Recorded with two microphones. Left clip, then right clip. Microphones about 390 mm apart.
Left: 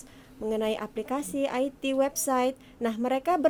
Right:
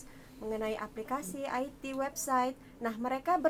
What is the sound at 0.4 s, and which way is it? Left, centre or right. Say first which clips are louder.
A woman's voice: left 7 dB; left.